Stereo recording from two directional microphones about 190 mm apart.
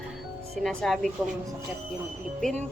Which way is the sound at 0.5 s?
Centre (ahead or behind).